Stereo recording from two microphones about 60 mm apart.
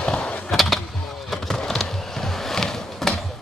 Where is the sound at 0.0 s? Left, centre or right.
Centre.